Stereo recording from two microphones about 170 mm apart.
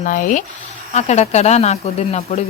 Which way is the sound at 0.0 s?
50° left (ahead or behind).